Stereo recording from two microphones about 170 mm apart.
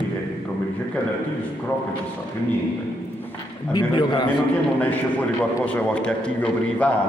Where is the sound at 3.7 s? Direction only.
25° left (ahead or behind).